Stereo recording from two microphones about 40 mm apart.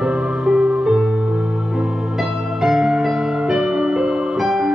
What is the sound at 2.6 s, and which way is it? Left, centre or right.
Music, centre.